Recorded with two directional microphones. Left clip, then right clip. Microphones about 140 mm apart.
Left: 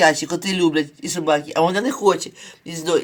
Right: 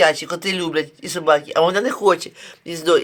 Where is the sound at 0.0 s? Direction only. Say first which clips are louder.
Even; 15° right (ahead or behind).